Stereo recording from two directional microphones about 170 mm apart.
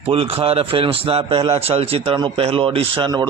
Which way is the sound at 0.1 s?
35° right (ahead or behind).